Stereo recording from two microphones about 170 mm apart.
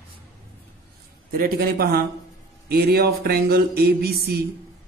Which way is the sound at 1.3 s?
60° right (ahead or behind).